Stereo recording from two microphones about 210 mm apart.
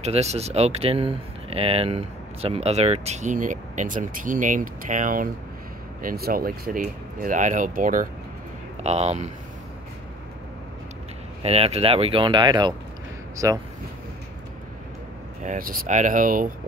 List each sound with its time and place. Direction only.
0.0 s speech: 30° right (ahead or behind)
11.4 s speech: 30° right (ahead or behind)
15.4 s speech: 40° right (ahead or behind)